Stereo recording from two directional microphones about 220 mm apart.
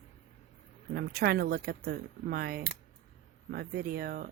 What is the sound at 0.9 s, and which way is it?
Speech, 45° right (ahead or behind).